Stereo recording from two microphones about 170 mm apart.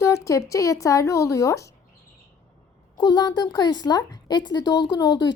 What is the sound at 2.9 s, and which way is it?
Speech, 25° left (ahead or behind).